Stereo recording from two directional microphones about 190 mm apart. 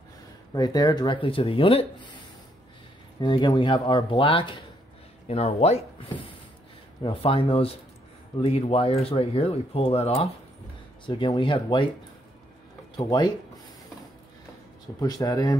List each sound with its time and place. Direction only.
0.6 s speech: 20° left (ahead or behind)
3.2 s speech: 25° left (ahead or behind)
12.9 s speech: 20° left (ahead or behind)
15.0 s speech: 20° left (ahead or behind)